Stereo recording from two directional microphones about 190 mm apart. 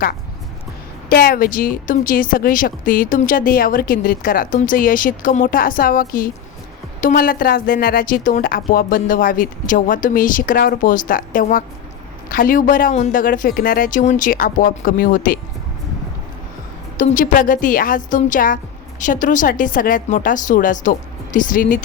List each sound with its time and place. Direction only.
1.1 s speech: 50° left (ahead or behind)
17.0 s speech: 45° left (ahead or behind)